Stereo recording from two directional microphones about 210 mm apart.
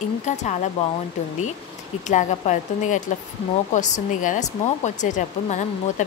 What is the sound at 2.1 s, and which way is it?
Speech, 35° left (ahead or behind).